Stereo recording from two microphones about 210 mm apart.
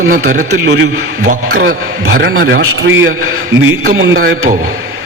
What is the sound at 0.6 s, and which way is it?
Speech, 60° right (ahead or behind).